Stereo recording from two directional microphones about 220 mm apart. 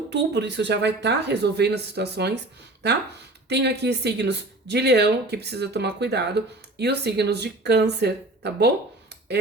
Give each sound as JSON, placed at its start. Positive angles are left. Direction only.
{"t": 0.1, "sound": "speech", "side_deg": -50}
{"t": 3.5, "sound": "speech", "side_deg": -50}